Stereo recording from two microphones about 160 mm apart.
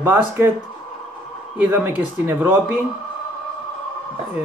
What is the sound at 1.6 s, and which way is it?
A man's voice, 10° right (ahead or behind).